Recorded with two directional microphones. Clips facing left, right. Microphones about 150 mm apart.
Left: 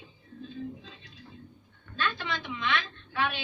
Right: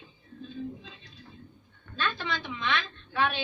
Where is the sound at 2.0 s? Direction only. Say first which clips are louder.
Even; 30° right (ahead or behind).